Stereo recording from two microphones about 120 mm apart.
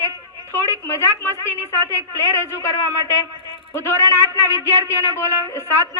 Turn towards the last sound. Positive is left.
turn(degrees=20)  # may be behind; listen again after turning